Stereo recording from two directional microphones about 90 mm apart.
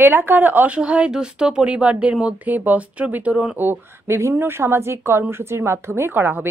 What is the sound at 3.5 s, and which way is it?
A woman's voice, 25° right (ahead or behind).